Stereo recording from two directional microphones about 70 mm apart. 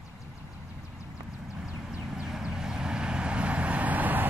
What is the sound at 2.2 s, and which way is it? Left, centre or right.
Vehicle, centre.